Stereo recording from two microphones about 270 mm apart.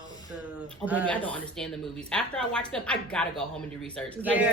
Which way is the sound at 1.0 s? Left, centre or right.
Centre.